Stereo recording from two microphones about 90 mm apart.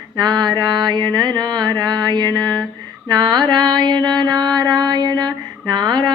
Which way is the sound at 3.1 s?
50° right (ahead or behind).